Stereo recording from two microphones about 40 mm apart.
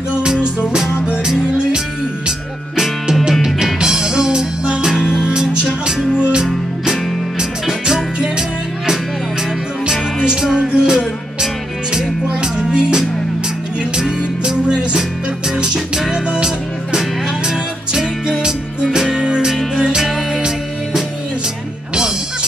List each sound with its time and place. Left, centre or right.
0.1 s music: right
3.4 s music: centre
6.1 s music: right